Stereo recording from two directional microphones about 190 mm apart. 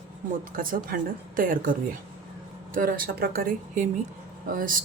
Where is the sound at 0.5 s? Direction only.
50° right (ahead or behind).